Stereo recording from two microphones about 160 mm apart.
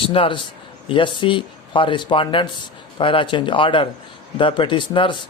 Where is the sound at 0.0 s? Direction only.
35° left (ahead or behind).